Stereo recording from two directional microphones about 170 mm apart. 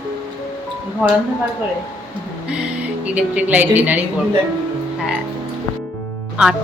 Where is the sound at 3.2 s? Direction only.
10° right (ahead or behind).